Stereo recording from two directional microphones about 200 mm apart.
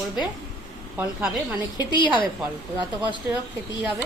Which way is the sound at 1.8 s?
20° left (ahead or behind).